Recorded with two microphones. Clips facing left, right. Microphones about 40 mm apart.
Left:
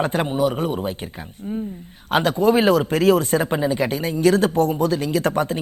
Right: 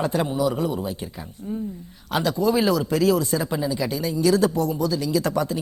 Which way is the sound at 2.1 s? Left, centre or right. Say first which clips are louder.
Left 4 dB; left.